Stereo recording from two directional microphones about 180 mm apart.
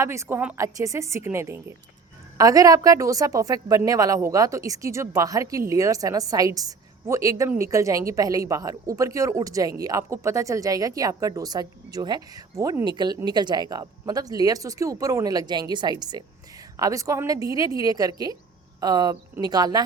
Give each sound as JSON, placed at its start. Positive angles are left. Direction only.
{"t": 0.0, "sound": "a woman's voice", "side_deg": -15}